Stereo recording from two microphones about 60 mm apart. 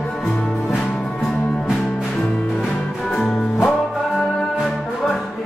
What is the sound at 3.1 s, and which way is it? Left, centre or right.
Music, centre.